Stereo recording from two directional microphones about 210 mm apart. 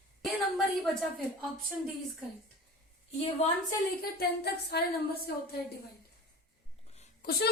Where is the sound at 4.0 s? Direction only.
45° left (ahead or behind).